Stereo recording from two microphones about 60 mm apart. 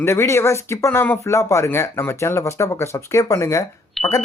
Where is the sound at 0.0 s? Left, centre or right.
Left.